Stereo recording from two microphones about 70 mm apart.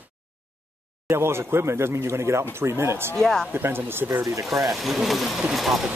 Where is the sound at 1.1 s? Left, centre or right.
Right.